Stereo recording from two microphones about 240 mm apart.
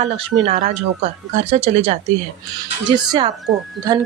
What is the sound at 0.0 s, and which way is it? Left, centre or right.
Speech, right.